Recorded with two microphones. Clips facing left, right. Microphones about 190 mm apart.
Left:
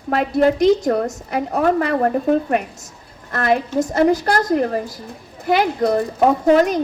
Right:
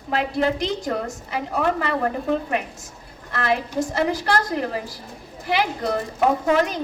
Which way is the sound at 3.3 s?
40° left (ahead or behind).